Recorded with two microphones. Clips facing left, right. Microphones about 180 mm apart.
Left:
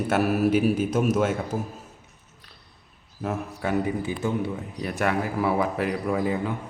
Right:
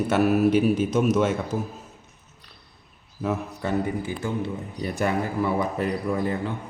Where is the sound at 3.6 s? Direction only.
15° left (ahead or behind).